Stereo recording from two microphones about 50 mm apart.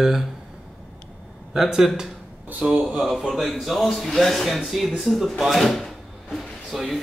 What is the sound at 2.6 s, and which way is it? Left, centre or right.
Speech, right.